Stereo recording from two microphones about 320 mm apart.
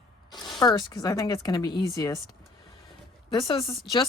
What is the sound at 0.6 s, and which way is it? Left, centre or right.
Speech, centre.